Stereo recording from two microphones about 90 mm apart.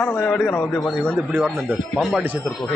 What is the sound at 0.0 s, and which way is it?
Speech, 15° left (ahead or behind).